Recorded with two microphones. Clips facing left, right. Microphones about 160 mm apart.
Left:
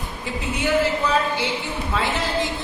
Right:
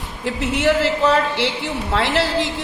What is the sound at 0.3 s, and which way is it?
A woman's voice, 80° right.